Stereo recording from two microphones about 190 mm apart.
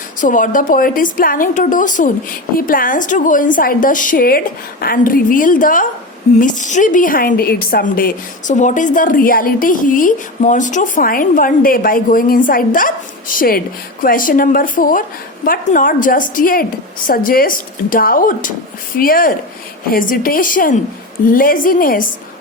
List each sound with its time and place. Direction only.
0.2 s a woman's voice: 45° left (ahead or behind)